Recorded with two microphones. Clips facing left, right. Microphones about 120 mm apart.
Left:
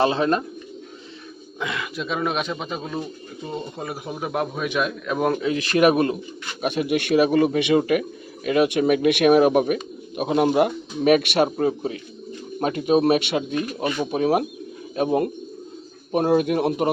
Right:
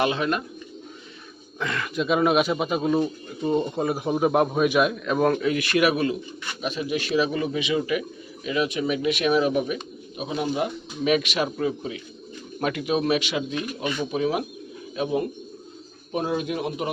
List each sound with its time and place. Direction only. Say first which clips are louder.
0.0 s speech: left 4 dB; 35° left (ahead or behind)
1.5 s speech: even; 10° left (ahead or behind)
2.0 s speech: right 6 dB; 5° right (ahead or behind)
5.2 s speech: even; 20° left (ahead or behind)
5.5 s speech: left 4 dB; 35° left (ahead or behind)
6.6 s speech: left 5 dB; 60° left (ahead or behind)